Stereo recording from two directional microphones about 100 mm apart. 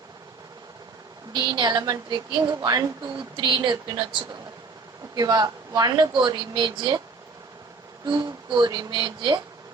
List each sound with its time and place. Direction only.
1.3 s speech: 50° right (ahead or behind)
3.3 s speech: 50° right (ahead or behind)
8.0 s speech: 45° right (ahead or behind)